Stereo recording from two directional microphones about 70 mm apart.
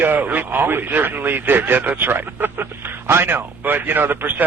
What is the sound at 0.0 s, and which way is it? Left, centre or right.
A man's voice, right.